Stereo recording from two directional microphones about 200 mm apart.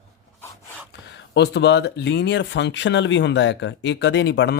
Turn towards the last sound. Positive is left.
turn(degrees=60)  # may be behind; listen again after turning